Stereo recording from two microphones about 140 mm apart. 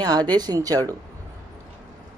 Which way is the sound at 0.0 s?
30° right (ahead or behind).